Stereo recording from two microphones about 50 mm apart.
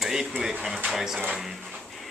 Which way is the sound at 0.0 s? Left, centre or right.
Centre.